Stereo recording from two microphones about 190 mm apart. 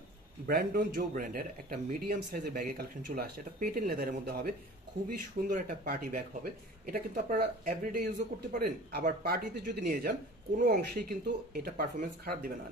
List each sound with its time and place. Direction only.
0.5 s speech: 50° right (ahead or behind)
5.5 s speech: 50° right (ahead or behind)